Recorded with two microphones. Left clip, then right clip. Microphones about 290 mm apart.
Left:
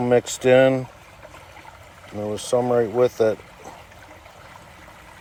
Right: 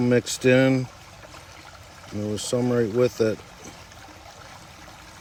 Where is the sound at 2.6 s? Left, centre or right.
Centre.